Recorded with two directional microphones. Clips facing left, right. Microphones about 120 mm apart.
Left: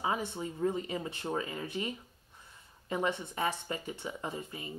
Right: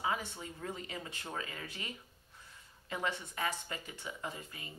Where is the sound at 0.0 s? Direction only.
25° left (ahead or behind).